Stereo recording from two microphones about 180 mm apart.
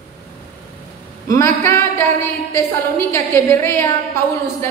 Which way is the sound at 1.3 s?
15° left (ahead or behind).